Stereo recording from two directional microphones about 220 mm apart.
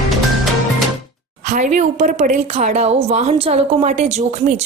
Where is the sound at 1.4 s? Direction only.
35° right (ahead or behind).